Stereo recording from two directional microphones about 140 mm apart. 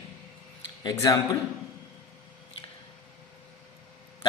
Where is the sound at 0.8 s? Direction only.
25° left (ahead or behind).